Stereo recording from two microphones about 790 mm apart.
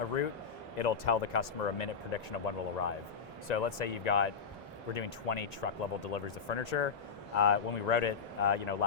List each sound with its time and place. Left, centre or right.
0.8 s speech: left